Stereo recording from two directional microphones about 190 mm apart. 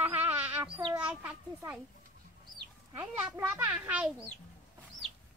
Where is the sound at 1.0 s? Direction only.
10° right (ahead or behind).